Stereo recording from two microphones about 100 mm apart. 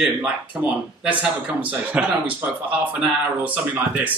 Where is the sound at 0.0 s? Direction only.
15° right (ahead or behind).